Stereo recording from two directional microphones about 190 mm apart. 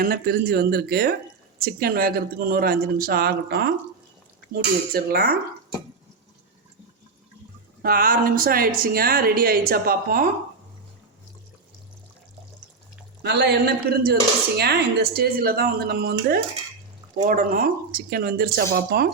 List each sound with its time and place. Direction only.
0.0 s speech: 55° right (ahead or behind)
7.8 s speech: 50° right (ahead or behind)
13.2 s speech: 60° right (ahead or behind)